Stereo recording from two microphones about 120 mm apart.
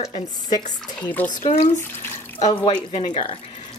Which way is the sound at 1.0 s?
15° left (ahead or behind).